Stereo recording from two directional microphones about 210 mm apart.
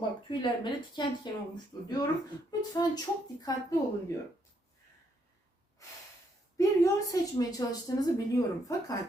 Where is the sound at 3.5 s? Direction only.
20° left (ahead or behind).